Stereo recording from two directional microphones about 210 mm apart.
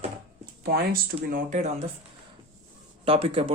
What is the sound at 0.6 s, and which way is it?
Speech, 45° right (ahead or behind).